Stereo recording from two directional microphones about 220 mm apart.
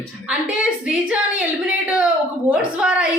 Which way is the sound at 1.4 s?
5° right (ahead or behind).